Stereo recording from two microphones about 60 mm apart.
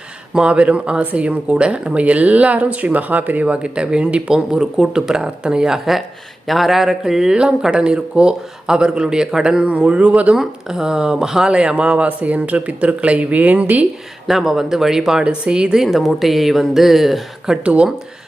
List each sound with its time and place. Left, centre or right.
0.3 s speech: centre
10.3 s speech: centre; by 13.8 s right
14.3 s a woman's voice: centre
17.6 s speech: right